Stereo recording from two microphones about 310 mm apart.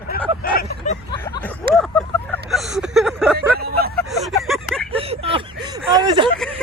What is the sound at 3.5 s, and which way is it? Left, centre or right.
Hubbub, right.